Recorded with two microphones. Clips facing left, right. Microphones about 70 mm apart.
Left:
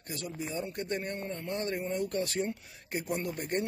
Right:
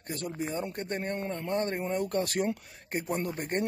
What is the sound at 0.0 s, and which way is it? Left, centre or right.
Speech, right.